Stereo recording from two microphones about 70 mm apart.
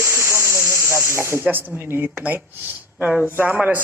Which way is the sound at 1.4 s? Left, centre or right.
Right.